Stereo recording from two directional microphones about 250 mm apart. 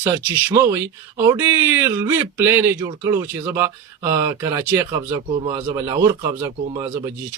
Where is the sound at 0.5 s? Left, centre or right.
Centre.